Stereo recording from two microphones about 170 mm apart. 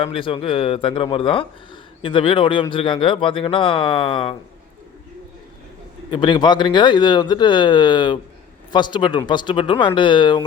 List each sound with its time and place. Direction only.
0.0 s speech: 30° left (ahead or behind)
6.1 s speech: 25° left (ahead or behind)